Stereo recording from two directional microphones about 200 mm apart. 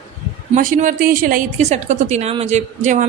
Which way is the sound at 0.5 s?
40° right (ahead or behind).